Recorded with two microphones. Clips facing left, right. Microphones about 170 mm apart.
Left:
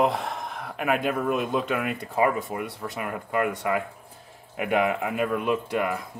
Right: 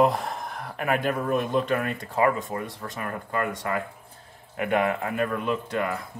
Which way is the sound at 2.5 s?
15° left (ahead or behind).